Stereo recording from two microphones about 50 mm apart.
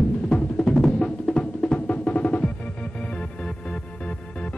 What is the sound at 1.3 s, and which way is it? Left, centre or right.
Music, centre.